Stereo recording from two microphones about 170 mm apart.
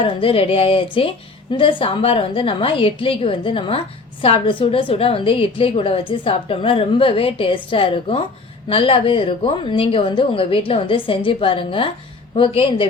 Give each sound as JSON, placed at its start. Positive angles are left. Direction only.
{"t": 0.0, "sound": "a woman's voice", "side_deg": 35}